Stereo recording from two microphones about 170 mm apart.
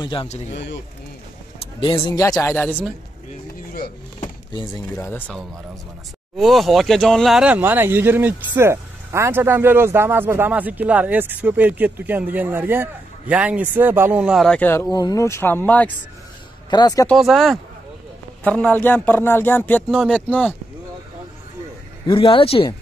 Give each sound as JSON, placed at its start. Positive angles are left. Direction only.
{"t": 0.0, "sound": "speech", "side_deg": 30}
{"t": 0.5, "sound": "speech", "side_deg": 90}
{"t": 1.6, "sound": "a sound", "side_deg": 30}
{"t": 2.1, "sound": "a man's voice", "side_deg": 15}
{"t": 4.6, "sound": "speech", "side_deg": 25}
{"t": 5.0, "sound": "a man's voice", "side_deg": 10}
{"t": 6.3, "sound": "speech", "side_deg": 0}
{"t": 16.7, "sound": "speech", "side_deg": 20}
{"t": 17.1, "sound": "a man's voice", "side_deg": 0}
{"t": 22.0, "sound": "speech", "side_deg": 30}